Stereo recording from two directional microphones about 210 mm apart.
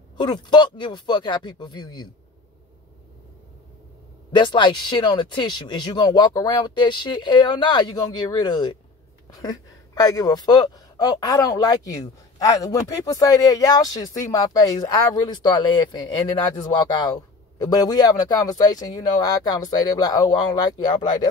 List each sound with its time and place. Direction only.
0.2 s speech: 20° left (ahead or behind)
4.3 s speech: 20° left (ahead or behind)